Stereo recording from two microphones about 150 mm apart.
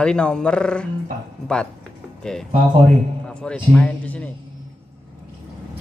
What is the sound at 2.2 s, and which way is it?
Speech, 5° left (ahead or behind).